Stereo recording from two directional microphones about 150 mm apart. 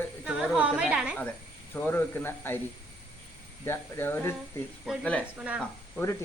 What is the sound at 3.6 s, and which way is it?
Speech, 15° left (ahead or behind).